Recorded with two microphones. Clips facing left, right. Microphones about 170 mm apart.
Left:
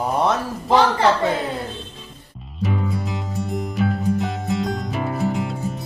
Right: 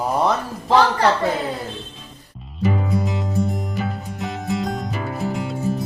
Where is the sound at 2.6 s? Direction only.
Centre (ahead or behind).